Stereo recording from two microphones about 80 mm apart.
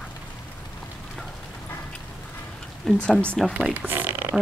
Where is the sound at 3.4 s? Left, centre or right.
Centre.